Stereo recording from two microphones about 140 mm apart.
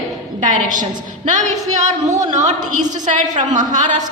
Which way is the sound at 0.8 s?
60° right (ahead or behind).